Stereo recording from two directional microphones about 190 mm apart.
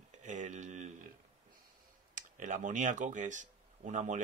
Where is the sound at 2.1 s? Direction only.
40° right (ahead or behind).